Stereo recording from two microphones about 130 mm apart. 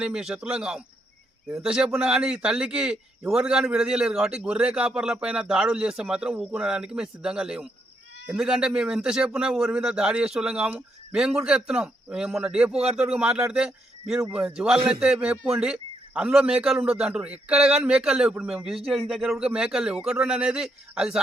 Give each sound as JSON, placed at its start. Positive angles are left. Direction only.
{"t": 0.0, "sound": "a man's voice", "side_deg": -5}